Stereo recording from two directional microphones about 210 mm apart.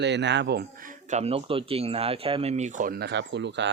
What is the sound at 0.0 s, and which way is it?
Speech, 55° right (ahead or behind).